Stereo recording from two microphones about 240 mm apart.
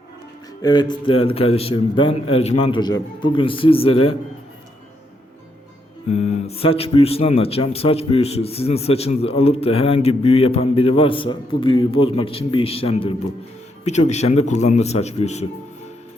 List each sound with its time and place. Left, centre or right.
0.6 s speech: centre
6.1 s speech: left